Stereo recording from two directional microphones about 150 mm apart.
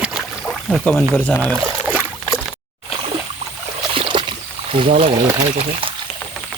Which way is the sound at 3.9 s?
35° right (ahead or behind).